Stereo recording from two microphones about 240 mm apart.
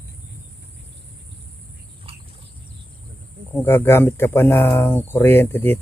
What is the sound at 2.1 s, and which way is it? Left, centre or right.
Wild animals, right.